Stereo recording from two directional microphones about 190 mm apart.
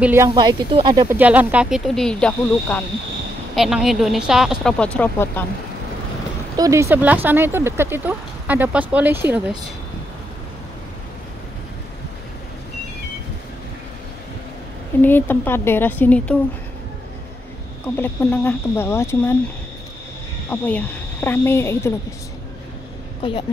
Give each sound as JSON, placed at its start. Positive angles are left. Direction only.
{"t": 0.0, "sound": "speech", "side_deg": -10}
{"t": 0.3, "sound": "speech", "side_deg": -25}
{"t": 1.0, "sound": "speech", "side_deg": -10}
{"t": 6.5, "sound": "speech", "side_deg": -15}
{"t": 15.0, "sound": "a woman's voice", "side_deg": 10}
{"t": 17.9, "sound": "a woman's voice", "side_deg": 10}
{"t": 20.4, "sound": "speech", "side_deg": 10}